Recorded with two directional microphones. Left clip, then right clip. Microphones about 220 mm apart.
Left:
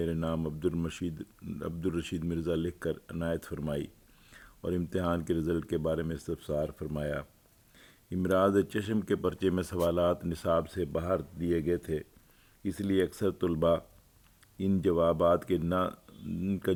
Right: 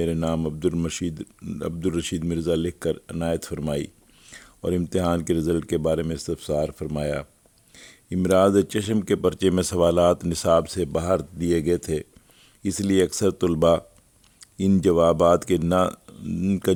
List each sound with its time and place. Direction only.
0.0 s speech: 40° right (ahead or behind)